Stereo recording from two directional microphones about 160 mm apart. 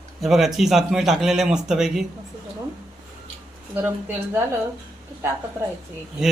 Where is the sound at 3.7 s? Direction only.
10° right (ahead or behind).